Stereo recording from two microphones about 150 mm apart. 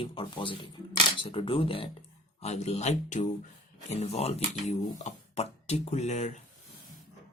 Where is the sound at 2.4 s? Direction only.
45° left (ahead or behind).